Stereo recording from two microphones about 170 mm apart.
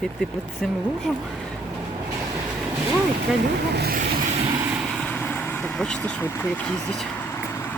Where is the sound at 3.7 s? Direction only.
70° right (ahead or behind).